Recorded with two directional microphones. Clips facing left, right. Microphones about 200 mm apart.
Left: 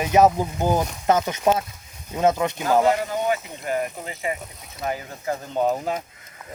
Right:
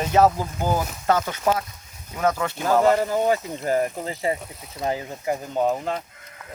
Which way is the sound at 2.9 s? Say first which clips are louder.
Right 3 dB; 40° right (ahead or behind).